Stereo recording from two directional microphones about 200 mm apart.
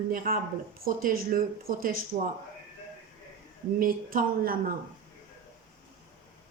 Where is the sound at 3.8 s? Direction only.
45° right (ahead or behind).